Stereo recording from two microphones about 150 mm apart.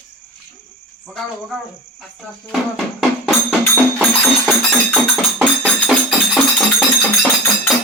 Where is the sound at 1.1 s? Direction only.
Centre (ahead or behind).